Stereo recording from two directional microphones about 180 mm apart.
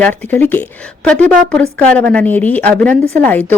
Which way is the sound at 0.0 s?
10° left (ahead or behind).